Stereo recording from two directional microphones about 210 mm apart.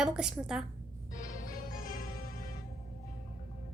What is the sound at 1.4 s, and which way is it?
Music, 40° left (ahead or behind).